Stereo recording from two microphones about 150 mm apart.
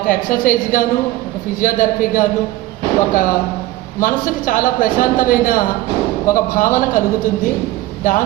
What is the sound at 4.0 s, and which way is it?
A man's voice, 60° left (ahead or behind).